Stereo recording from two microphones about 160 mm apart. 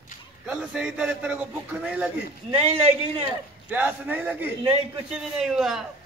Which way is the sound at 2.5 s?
35° right (ahead or behind).